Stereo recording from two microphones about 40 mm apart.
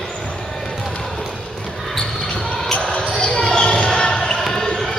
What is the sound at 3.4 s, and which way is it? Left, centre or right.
Basketball bounce, centre.